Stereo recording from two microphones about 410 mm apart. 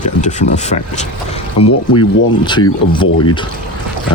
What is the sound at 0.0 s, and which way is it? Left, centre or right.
Speech, centre.